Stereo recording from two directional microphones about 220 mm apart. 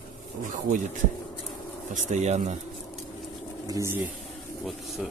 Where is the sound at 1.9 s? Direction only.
35° right (ahead or behind).